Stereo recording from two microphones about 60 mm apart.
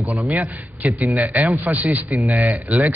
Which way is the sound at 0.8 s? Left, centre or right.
Right.